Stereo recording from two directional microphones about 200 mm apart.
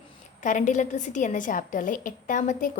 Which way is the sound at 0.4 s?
40° left (ahead or behind).